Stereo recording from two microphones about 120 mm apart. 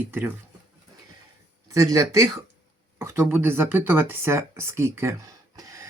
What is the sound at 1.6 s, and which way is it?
Speech, 25° right (ahead or behind).